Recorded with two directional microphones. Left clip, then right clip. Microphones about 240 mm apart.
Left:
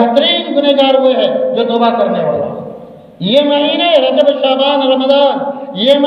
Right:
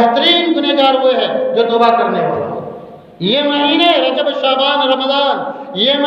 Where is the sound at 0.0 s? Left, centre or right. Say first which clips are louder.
Even; right.